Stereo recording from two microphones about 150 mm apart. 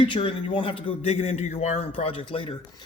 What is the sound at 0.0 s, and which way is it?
Speech, 35° left (ahead or behind).